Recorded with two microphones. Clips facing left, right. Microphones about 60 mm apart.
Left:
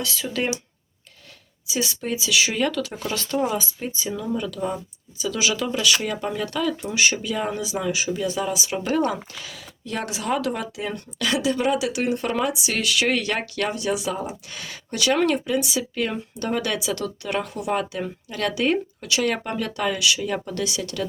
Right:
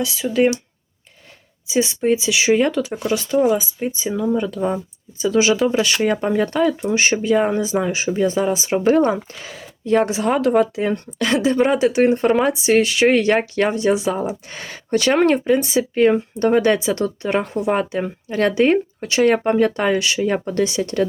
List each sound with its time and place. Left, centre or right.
0.0 s speech: centre
1.6 s speech: right
2.9 s speech: centre; by 10.2 s right
10.2 s speech: right